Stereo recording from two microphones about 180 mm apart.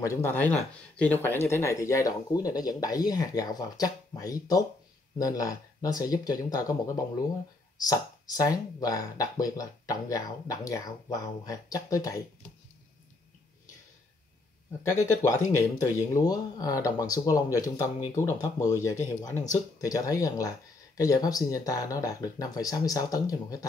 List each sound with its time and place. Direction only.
0.0 s speech: 15° left (ahead or behind)
15.6 s speech: 15° left (ahead or behind)